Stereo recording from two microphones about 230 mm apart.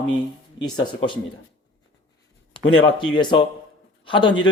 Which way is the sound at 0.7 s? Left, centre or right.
Left.